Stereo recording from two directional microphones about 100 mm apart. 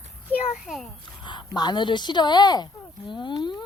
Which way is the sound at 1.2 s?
45° left (ahead or behind).